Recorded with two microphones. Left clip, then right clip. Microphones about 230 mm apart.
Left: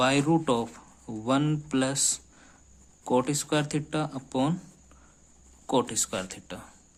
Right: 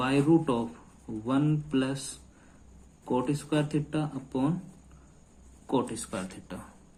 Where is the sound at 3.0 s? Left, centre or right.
Left.